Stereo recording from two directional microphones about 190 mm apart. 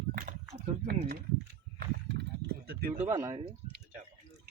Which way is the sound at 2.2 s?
55° right (ahead or behind).